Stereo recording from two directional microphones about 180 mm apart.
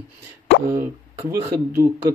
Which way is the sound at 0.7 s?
15° right (ahead or behind).